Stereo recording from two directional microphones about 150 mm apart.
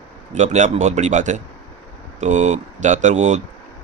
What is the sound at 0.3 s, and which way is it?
Speech, 50° right (ahead or behind).